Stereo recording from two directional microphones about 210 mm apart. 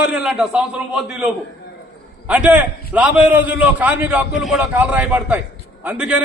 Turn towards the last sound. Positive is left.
turn(degrees=-5)  # may be behind; listen again after turning